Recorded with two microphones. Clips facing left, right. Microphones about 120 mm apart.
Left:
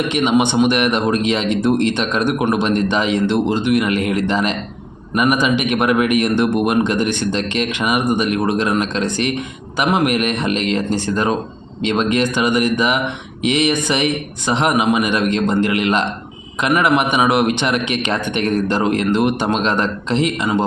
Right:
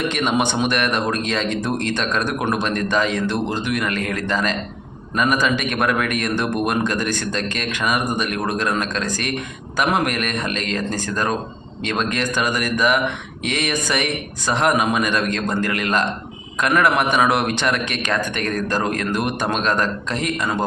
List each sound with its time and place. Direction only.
0.1 s a man's voice: 15° left (ahead or behind)